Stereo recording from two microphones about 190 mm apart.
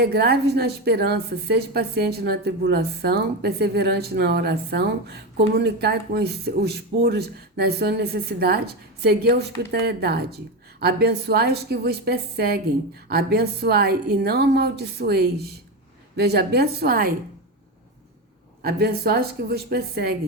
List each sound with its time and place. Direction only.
0.0 s a woman's voice: 55° right (ahead or behind)
18.6 s a woman's voice: 55° right (ahead or behind)